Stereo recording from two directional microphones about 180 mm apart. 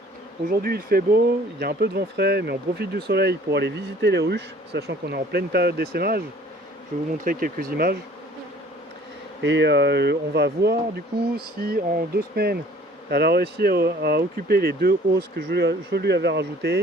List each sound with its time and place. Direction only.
0.6 s speech: 55° right (ahead or behind)
7.3 s speech: 50° right (ahead or behind)
9.4 s speech: 80° right
11.6 s speech: 60° right (ahead or behind)